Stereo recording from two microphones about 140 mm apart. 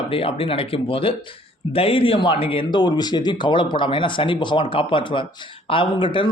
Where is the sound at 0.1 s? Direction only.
40° left (ahead or behind).